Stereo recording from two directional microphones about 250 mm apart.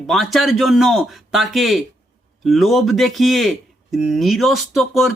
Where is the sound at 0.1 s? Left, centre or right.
Centre.